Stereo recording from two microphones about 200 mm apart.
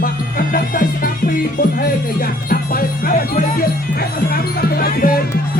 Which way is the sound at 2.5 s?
45° left (ahead or behind).